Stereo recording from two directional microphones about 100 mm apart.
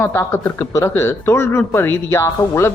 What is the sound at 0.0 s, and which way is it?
Speech, 25° left (ahead or behind).